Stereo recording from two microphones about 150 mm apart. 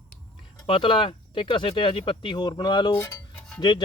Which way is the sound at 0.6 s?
35° left (ahead or behind).